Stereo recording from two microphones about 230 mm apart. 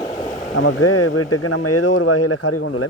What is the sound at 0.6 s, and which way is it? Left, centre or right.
Speech, left.